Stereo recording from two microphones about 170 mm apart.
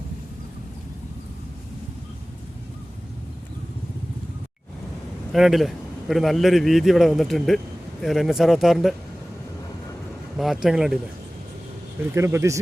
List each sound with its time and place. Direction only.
5.3 s a man's voice: centre (ahead or behind)
10.3 s a man's voice: centre (ahead or behind)
12.1 s speech: 15° right (ahead or behind)